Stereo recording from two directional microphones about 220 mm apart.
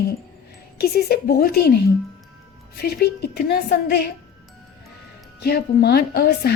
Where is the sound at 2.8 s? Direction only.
45° left (ahead or behind).